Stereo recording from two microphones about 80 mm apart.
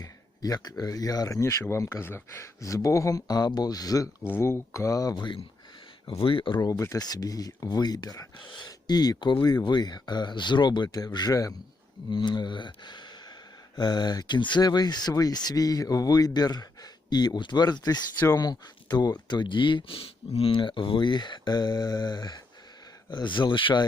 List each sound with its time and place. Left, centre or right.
0.0 s speech: left
1.4 s speech: left
4.3 s speech: left
5.1 s speech: left
6.6 s speech: left
12.1 s speech: left
23.0 s speech: left